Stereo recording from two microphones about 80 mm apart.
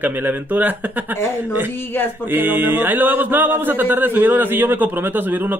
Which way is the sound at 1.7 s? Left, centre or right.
Left.